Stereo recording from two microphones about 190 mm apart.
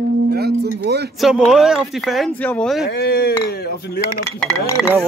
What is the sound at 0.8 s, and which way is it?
Speech, 60° right (ahead or behind).